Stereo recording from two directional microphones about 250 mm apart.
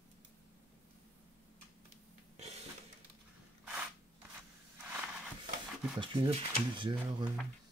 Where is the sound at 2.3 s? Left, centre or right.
Right.